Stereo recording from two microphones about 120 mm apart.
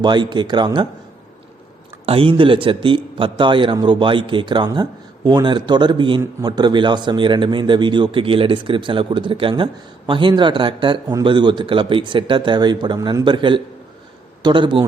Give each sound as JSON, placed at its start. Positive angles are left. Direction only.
{"t": 0.0, "sound": "speech", "side_deg": -40}
{"t": 2.0, "sound": "speech", "side_deg": -50}